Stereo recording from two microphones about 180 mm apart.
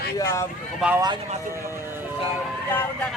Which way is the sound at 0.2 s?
15° left (ahead or behind).